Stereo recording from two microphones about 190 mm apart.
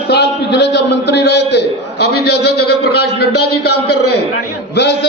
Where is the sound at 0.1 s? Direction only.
60° left (ahead or behind).